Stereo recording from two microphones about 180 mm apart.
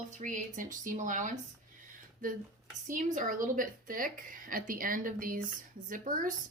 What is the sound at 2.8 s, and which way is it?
A woman's voice, 45° right (ahead or behind).